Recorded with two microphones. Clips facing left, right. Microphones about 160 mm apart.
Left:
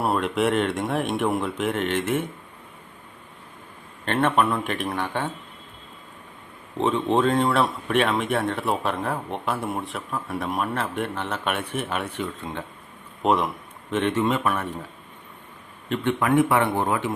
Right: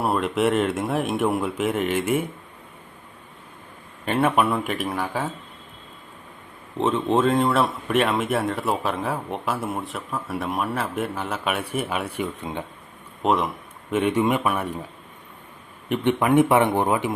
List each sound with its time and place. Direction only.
0.0 s speech: centre (ahead or behind)
4.0 s speech: 10° right (ahead or behind)
6.7 s speech: centre (ahead or behind); by 12.6 s 15° right (ahead or behind)
13.2 s speech: centre (ahead or behind)
13.9 s speech: 10° right (ahead or behind)
15.9 s speech: 20° right (ahead or behind)